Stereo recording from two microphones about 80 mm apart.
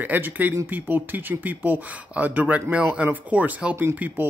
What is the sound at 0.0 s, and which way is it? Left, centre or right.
Speech, right.